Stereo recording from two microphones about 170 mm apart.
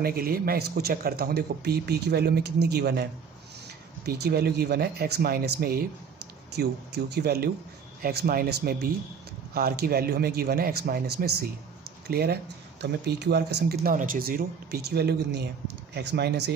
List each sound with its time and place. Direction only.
0.0 s speech: 60° right (ahead or behind)
12.8 s speech: 80° right
15.9 s speech: 85° right